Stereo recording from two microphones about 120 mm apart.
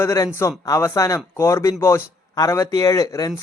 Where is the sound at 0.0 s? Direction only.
25° left (ahead or behind).